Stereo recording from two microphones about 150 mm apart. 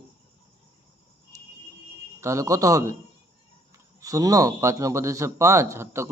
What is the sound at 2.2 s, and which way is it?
Speech, 20° right (ahead or behind).